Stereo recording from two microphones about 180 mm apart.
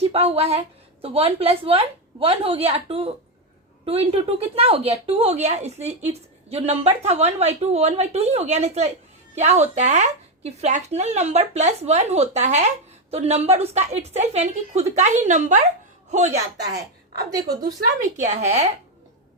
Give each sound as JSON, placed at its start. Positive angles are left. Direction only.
{"t": 0.1, "sound": "speech", "side_deg": -35}
{"t": 18.2, "sound": "speech", "side_deg": -40}